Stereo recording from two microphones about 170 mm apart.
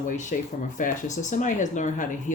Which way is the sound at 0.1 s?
50° left (ahead or behind).